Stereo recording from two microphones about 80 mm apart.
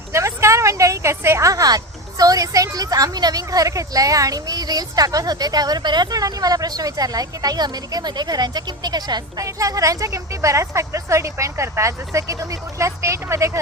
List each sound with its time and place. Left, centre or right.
0.1 s a woman's voice: right
9.4 s a woman's voice: right